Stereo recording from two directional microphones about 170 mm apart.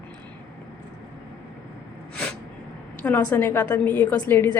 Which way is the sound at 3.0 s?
10° left (ahead or behind).